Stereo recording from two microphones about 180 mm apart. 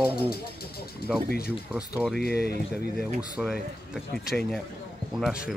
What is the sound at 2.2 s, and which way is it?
Speech, 60° left (ahead or behind).